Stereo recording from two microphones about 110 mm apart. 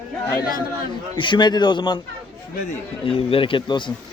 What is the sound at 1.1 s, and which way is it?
Speech, 45° left (ahead or behind).